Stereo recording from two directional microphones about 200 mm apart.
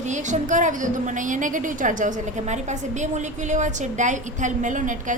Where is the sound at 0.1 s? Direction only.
35° right (ahead or behind).